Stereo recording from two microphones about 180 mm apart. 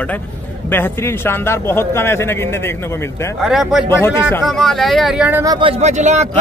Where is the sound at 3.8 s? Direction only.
15° left (ahead or behind).